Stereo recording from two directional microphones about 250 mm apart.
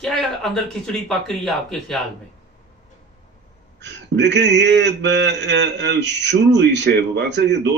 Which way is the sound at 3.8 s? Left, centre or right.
Right.